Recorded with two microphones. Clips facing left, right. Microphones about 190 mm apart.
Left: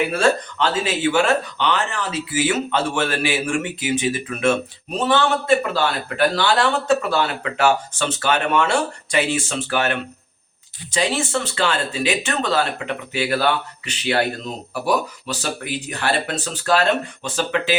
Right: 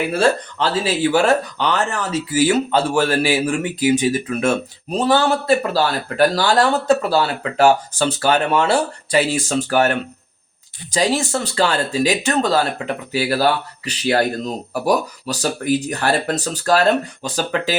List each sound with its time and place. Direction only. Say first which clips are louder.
0.1 s speech: right 2 dB; 30° right (ahead or behind)